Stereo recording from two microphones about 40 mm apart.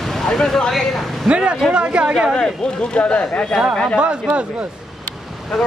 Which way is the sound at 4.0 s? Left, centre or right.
Right.